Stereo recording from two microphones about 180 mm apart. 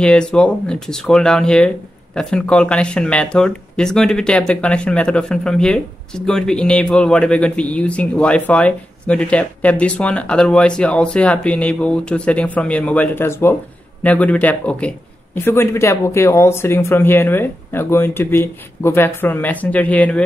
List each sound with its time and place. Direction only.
0.0 s a man's voice: 5° left (ahead or behind)